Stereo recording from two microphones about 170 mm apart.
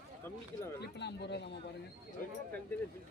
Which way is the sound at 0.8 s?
80° left.